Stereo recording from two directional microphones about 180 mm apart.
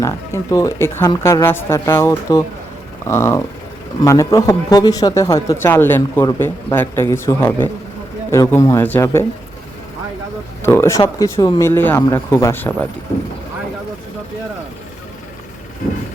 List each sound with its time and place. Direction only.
0.0 s speech: 15° left (ahead or behind)
10.6 s speech: 15° left (ahead or behind)